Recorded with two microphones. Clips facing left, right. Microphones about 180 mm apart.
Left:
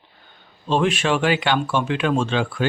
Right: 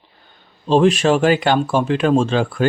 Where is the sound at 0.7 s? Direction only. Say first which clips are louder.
Right 6 dB; 40° right (ahead or behind).